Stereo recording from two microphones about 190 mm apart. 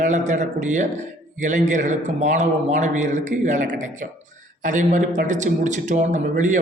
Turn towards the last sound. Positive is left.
turn(degrees=-40)  # may be behind; listen again after turning